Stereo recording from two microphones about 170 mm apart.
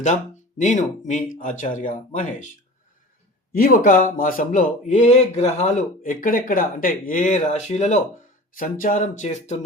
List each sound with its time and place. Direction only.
0.6 s speech: 45° left (ahead or behind)
3.5 s speech: 55° left (ahead or behind); by 8.0 s 40° left (ahead or behind)
8.5 s speech: 55° left (ahead or behind)